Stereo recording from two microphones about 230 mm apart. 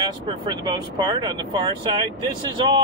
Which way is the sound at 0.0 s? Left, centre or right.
Centre.